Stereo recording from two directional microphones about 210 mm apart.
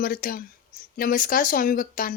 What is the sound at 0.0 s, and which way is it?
A woman's voice, 45° left (ahead or behind).